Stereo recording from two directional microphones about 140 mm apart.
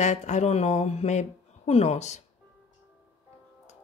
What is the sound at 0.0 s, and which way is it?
Speech, 60° left (ahead or behind).